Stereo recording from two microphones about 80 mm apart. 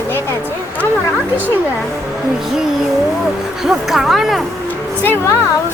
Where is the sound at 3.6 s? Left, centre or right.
Centre.